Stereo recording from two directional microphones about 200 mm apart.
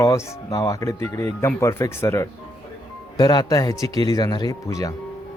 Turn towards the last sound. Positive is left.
turn(degrees=15)  # may be behind; listen again after turning